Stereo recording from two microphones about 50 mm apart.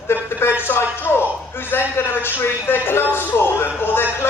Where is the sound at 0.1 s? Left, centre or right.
Left.